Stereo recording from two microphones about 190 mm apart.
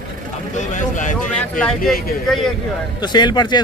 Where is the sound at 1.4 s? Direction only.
5° left (ahead or behind).